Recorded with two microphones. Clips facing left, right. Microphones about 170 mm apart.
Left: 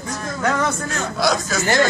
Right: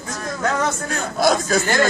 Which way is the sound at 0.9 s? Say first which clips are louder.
Right 4 dB; 55° right (ahead or behind).